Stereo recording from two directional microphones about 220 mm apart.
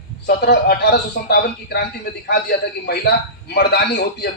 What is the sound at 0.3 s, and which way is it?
A man's voice, 45° left (ahead or behind).